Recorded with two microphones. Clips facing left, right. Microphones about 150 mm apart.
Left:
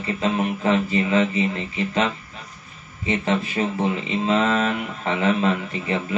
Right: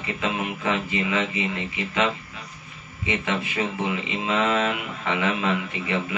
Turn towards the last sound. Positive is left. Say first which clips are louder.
# left 2 dB
turn(degrees=40)  # may be behind; listen again after turning